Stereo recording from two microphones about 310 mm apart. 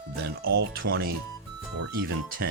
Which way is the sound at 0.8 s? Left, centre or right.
Right.